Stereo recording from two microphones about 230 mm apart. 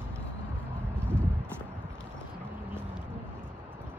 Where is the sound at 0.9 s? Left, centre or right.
Centre.